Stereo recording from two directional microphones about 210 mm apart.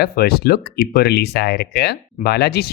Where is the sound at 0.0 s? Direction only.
50° left (ahead or behind).